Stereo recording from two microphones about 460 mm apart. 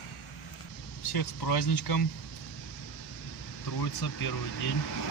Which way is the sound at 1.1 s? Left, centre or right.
Left.